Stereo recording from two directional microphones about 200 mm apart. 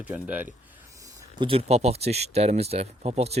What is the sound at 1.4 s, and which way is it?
Speech, 30° right (ahead or behind).